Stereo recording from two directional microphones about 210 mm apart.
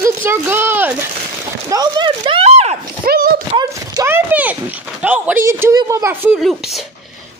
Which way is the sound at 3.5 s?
10° right (ahead or behind).